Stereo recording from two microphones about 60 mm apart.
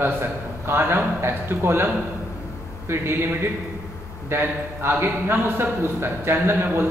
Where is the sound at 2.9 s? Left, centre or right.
Right.